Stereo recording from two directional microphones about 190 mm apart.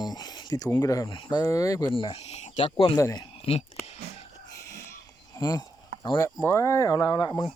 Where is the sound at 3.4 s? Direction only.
30° left (ahead or behind).